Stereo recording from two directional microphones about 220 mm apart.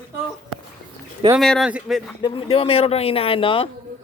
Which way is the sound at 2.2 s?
20° left (ahead or behind).